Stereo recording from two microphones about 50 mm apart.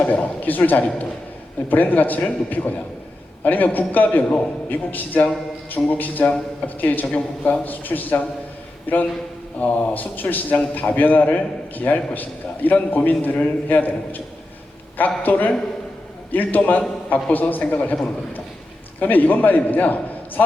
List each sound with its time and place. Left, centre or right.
0.0 s a man's voice: left
7.1 s a man's voice: left
7.6 s a man's voice: left
15.2 s a man's voice: left
18.9 s a man's voice: left